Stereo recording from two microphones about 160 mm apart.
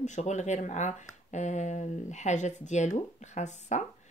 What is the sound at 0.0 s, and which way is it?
Speech, 50° left (ahead or behind).